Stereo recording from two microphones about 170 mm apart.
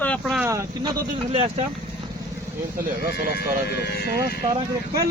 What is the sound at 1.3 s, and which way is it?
Speech, 35° right (ahead or behind).